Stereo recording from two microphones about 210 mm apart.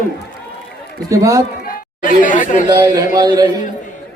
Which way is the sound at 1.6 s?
40° left (ahead or behind).